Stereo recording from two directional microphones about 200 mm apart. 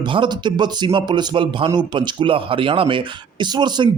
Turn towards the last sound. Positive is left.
turn(degrees=-20)  # may be behind; listen again after turning